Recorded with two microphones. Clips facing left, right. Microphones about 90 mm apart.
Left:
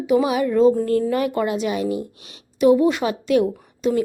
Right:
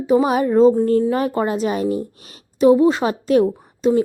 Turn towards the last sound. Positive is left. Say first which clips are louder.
# right 4 dB
turn(degrees=-30)  # may be behind; listen again after turning